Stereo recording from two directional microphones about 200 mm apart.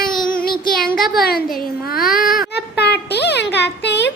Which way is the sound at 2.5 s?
55° left (ahead or behind).